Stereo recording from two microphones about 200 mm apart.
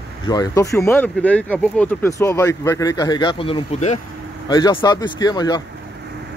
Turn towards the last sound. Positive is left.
turn(degrees=20)  # may be behind; listen again after turning